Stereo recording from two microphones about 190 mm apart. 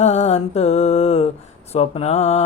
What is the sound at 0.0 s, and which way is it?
Mantra, 35° left (ahead or behind).